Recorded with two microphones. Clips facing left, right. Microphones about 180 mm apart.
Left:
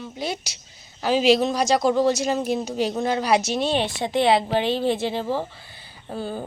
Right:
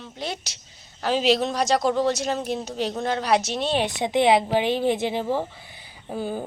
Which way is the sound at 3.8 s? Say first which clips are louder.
Right 1 dB; 20° right (ahead or behind).